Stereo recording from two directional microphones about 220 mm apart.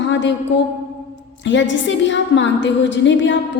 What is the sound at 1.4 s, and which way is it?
A woman's voice, 55° left (ahead or behind).